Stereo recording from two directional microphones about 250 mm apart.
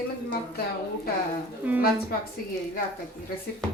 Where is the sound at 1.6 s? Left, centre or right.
Centre.